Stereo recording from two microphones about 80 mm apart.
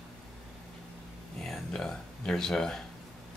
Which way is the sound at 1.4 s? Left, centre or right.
Centre.